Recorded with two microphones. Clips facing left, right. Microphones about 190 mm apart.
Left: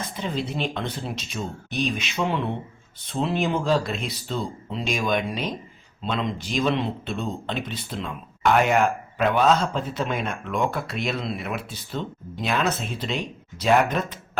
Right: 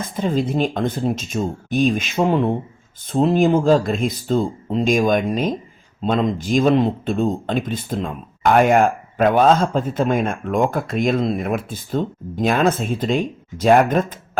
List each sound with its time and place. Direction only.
0.0 s a man's voice: 50° right (ahead or behind)